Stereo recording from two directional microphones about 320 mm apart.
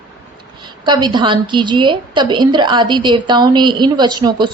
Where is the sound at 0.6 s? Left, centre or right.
Centre.